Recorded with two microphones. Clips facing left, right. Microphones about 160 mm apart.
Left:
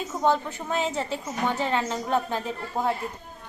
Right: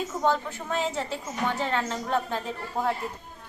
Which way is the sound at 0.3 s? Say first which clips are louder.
Left 3 dB; centre (ahead or behind).